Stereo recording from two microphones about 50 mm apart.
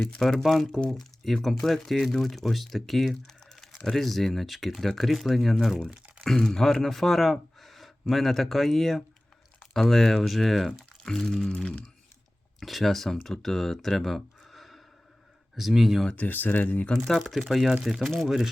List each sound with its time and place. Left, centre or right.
0.2 s speech: centre
0.8 s speech: centre
3.2 s typing: centre
3.8 s speech: centre
11.1 s a sound: centre
12.5 s speech: centre
16.1 s speech: left
17.2 s speech: centre